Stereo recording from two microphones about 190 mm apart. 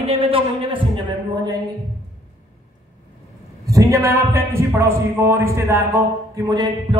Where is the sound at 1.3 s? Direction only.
20° right (ahead or behind).